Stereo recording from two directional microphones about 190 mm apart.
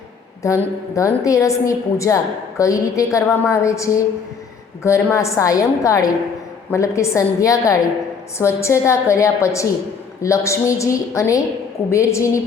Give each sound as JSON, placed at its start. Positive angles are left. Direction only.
{"t": 0.4, "sound": "a woman's voice", "side_deg": 15}